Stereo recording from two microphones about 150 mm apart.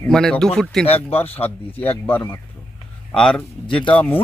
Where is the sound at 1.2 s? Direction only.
40° left (ahead or behind).